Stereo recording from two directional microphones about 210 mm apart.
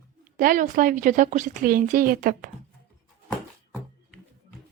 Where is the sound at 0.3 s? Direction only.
40° right (ahead or behind).